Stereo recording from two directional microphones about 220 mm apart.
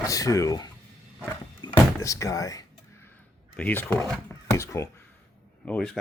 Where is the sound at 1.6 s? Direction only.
15° left (ahead or behind).